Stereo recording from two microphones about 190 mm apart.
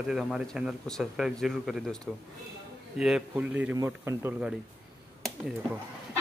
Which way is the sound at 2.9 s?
5° right (ahead or behind).